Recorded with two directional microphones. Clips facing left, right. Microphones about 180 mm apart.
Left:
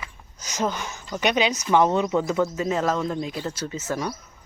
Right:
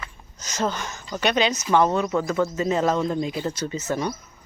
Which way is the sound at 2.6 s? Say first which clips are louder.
Right 2 dB; 5° left (ahead or behind).